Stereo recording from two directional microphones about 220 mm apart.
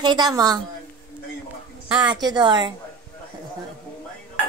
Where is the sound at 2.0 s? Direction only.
20° right (ahead or behind).